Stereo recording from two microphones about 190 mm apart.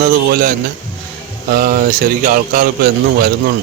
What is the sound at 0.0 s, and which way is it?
Speech, 50° right (ahead or behind).